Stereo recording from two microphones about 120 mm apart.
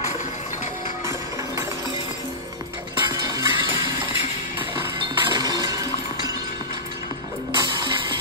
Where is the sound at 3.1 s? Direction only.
35° right (ahead or behind).